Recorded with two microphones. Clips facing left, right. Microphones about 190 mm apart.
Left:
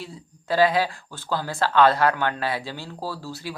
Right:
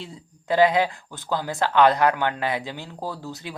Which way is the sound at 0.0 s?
20° right (ahead or behind).